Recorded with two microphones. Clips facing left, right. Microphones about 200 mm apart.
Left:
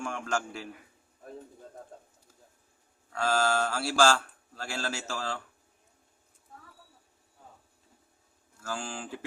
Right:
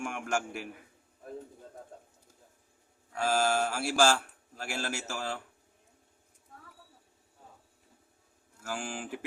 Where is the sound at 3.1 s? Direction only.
10° right (ahead or behind).